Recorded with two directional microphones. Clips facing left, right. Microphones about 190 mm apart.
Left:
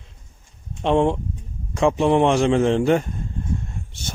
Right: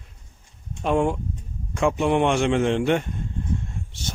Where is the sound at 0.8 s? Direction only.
30° left (ahead or behind).